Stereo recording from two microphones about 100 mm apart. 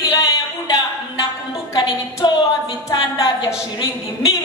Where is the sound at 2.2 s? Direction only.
50° left (ahead or behind).